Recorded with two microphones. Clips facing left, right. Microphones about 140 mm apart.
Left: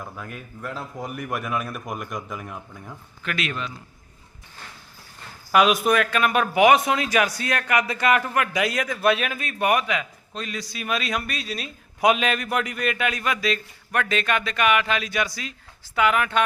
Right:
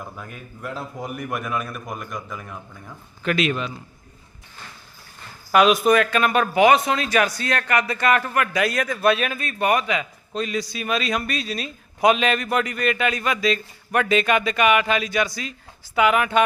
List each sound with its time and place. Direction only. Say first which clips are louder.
0.0 s a man's voice: even; centre (ahead or behind)
3.2 s a man's voice: right 7 dB; 20° right (ahead or behind)
5.5 s a man's voice: right 3 dB; 5° left (ahead or behind)